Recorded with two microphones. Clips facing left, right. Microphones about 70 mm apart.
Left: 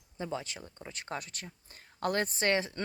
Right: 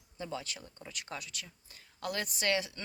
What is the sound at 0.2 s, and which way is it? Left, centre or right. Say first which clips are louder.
Speech: left 3 dB; left.